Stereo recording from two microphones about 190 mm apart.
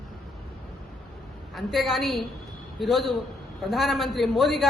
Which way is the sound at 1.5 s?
Centre (ahead or behind).